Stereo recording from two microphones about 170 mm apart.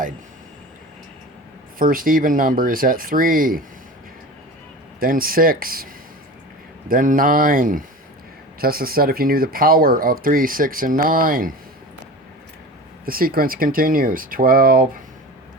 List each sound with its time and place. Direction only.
1.8 s speech: 55° right (ahead or behind)
4.9 s speech: 60° right (ahead or behind)
13.1 s speech: 60° right (ahead or behind)